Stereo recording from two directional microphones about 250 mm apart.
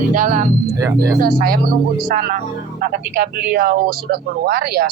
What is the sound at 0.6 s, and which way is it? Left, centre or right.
Speech, centre.